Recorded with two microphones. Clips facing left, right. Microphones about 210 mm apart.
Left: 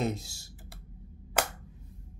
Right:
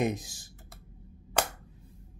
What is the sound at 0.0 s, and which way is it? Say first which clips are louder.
Computer keyboard: right 2 dB; 15° right (ahead or behind).